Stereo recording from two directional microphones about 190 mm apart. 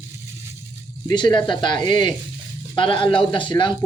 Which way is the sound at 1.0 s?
25° left (ahead or behind).